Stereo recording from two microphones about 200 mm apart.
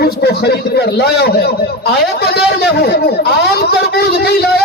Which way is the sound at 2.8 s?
55° left (ahead or behind).